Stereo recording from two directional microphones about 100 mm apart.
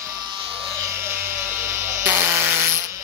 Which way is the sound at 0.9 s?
25° right (ahead or behind).